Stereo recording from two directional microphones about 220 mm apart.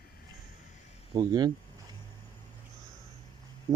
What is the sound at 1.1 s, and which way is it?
Speech, 20° right (ahead or behind).